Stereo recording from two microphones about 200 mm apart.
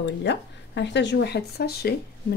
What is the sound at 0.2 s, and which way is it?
Speech, 60° left (ahead or behind).